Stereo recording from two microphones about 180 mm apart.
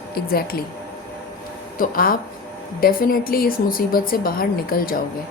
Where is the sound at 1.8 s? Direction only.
50° left (ahead or behind).